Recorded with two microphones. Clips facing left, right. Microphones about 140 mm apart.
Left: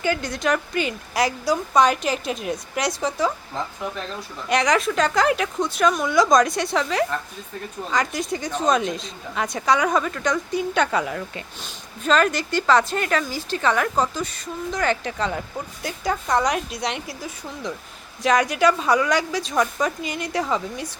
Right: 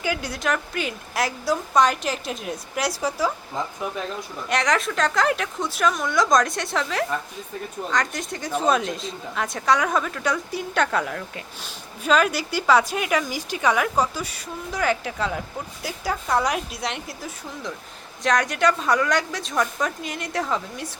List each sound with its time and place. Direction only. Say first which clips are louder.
0.0 s speech: left 3 dB; 5° right (ahead or behind)
4.4 s speech: left 3 dB; centre (ahead or behind)